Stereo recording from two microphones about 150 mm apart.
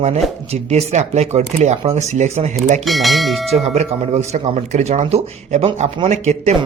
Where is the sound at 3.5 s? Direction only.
45° right (ahead or behind).